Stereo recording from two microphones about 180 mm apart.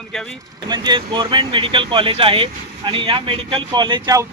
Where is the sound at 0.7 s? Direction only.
25° right (ahead or behind).